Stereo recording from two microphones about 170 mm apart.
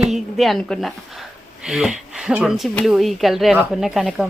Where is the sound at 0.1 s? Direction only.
Centre (ahead or behind).